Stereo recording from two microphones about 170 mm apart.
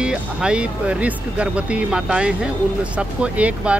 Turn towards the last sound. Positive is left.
turn(degrees=-5)  # may be behind; listen again after turning